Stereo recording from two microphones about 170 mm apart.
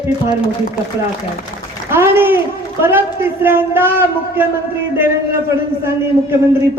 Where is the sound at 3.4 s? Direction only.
15° right (ahead or behind).